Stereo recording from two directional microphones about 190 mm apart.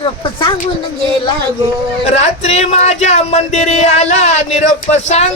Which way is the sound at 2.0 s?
35° left (ahead or behind).